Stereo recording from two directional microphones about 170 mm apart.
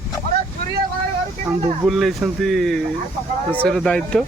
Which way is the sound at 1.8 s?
Centre (ahead or behind).